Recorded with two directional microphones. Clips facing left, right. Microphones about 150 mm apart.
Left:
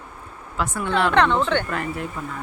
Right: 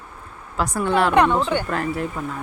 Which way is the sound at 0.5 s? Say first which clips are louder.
Right 3 dB; 35° right (ahead or behind).